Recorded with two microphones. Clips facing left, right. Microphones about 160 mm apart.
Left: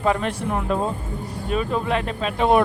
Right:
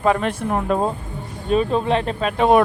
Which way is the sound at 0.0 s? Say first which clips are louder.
Right 3 dB; 60° right (ahead or behind).